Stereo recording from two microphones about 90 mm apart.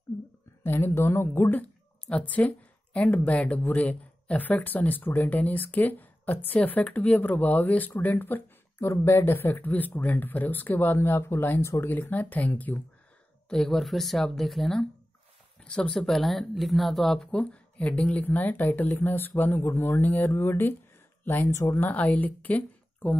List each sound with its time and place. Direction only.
0.7 s a woman's voice: 25° left (ahead or behind)
13.5 s a woman's voice: 5° left (ahead or behind); by 20.7 s 25° left (ahead or behind)
21.2 s a sound: 20° left (ahead or behind)
21.5 s speech: 35° left (ahead or behind)
21.7 s speech: 20° left (ahead or behind)